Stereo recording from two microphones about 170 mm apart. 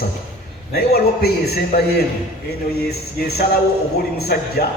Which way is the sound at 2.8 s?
65° left (ahead or behind).